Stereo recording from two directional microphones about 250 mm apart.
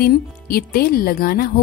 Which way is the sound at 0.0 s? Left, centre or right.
Left.